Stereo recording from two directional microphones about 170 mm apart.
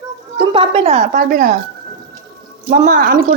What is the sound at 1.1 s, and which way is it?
Speech, 55° right (ahead or behind).